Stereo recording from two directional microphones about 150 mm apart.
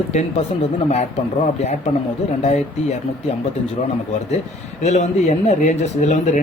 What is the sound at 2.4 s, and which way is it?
Speech, 45° left (ahead or behind).